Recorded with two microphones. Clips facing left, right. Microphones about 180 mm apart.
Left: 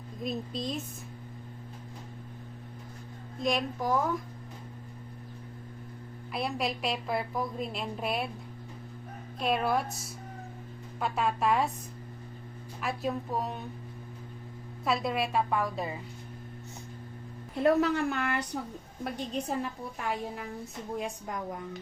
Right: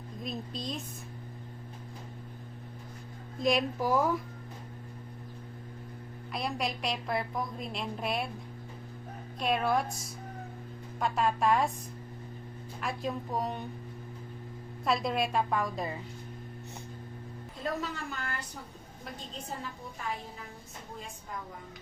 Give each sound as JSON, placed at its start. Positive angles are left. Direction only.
{"t": 0.2, "sound": "a woman's voice", "side_deg": 0}
{"t": 3.4, "sound": "a woman's voice", "side_deg": -5}
{"t": 6.3, "sound": "a woman's voice", "side_deg": 0}
{"t": 9.4, "sound": "a woman's voice", "side_deg": 0}
{"t": 11.0, "sound": "a woman's voice", "side_deg": 0}
{"t": 12.8, "sound": "a woman's voice", "side_deg": 5}
{"t": 14.8, "sound": "a woman's voice", "side_deg": 5}
{"t": 17.5, "sound": "a woman's voice", "side_deg": 65}
{"t": 21.0, "sound": "a woman's voice", "side_deg": 75}